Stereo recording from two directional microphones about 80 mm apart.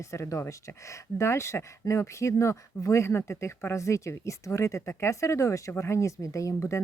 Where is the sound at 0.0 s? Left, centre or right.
Left.